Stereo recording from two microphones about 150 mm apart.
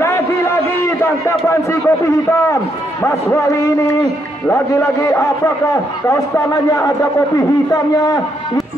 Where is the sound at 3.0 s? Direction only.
20° left (ahead or behind).